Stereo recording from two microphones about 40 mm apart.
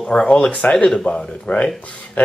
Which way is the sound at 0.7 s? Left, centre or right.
Centre.